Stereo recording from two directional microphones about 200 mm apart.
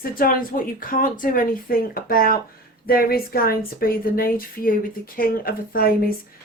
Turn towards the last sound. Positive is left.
turn(degrees=50)  # may be behind; listen again after turning